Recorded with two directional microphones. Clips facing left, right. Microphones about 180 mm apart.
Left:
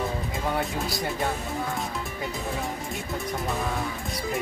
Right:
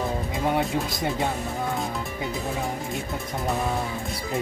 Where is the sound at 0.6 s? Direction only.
20° right (ahead or behind).